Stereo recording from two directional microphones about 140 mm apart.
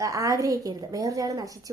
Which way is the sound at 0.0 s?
25° right (ahead or behind).